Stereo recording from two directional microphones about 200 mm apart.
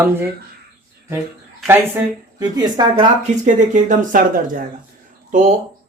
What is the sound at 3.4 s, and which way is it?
Speech, 40° right (ahead or behind).